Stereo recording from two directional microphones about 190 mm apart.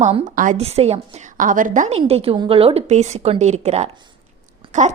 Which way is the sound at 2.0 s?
30° right (ahead or behind).